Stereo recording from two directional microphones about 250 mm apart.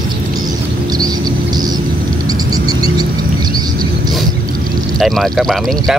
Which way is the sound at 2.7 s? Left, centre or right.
Centre.